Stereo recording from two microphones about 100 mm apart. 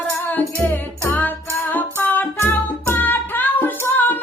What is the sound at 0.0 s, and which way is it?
Music, 15° left (ahead or behind).